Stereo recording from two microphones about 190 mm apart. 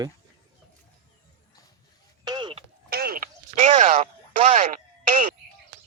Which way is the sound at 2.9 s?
55° right (ahead or behind).